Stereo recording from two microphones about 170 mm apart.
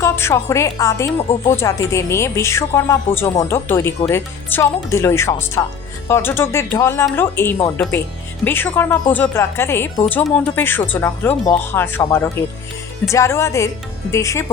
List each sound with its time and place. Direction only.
0.0 s a woman's voice: 15° left (ahead or behind)